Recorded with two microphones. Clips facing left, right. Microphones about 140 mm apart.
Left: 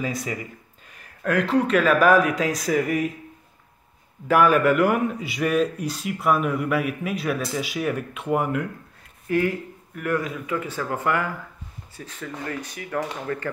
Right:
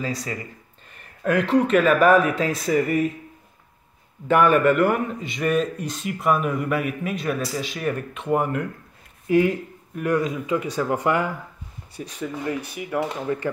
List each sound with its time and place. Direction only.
0.0 s speech: 15° left (ahead or behind)
4.3 s a man's voice: 5° left (ahead or behind)
9.3 s speech: 20° right (ahead or behind)